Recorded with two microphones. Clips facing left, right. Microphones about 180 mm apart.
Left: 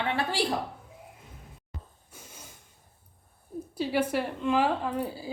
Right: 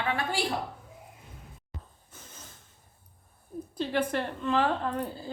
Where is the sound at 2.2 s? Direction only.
10° left (ahead or behind).